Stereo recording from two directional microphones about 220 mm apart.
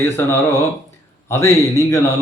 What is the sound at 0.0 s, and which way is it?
A man's voice, 10° left (ahead or behind).